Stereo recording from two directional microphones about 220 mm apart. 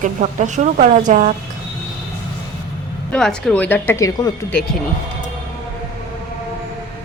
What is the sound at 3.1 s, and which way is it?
Speech, 5° left (ahead or behind).